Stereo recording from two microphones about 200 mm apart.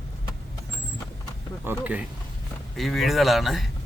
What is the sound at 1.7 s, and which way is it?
Speech, 10° right (ahead or behind).